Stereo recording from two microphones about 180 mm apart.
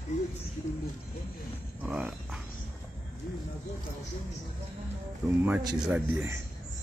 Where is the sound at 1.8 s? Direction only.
5° right (ahead or behind).